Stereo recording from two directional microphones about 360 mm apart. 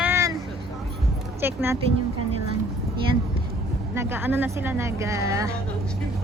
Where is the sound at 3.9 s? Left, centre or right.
Centre.